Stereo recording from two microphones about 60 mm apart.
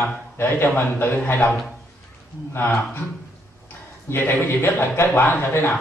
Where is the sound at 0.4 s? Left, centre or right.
Left.